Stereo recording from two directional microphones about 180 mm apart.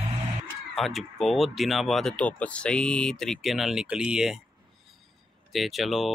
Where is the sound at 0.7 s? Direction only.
Centre (ahead or behind).